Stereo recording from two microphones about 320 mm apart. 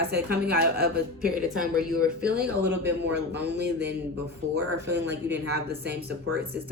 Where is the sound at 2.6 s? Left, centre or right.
Right.